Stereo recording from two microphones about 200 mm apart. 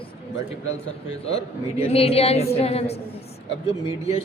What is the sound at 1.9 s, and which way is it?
A man's voice, 30° left (ahead or behind).